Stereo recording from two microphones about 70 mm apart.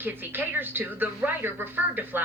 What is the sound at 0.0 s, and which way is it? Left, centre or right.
Speech, right.